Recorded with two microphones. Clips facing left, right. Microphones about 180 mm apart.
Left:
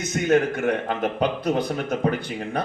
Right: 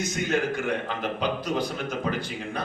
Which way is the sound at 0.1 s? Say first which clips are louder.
Left 10 dB; 65° left (ahead or behind).